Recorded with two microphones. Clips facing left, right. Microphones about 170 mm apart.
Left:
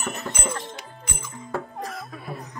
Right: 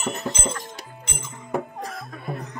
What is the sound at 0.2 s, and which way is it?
Music, 25° right (ahead or behind).